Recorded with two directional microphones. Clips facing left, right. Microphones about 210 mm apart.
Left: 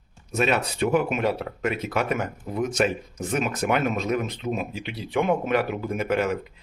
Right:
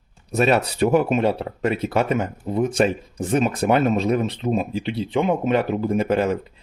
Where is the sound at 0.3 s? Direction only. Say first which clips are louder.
Right 5 dB; 40° right (ahead or behind).